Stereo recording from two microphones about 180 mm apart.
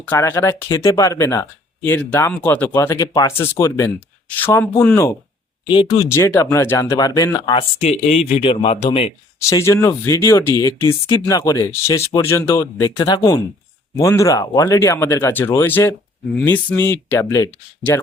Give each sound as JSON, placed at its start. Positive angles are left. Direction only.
{"t": 0.1, "sound": "speech", "side_deg": 10}
{"t": 5.6, "sound": "speech", "side_deg": 25}
{"t": 9.4, "sound": "speech", "side_deg": 15}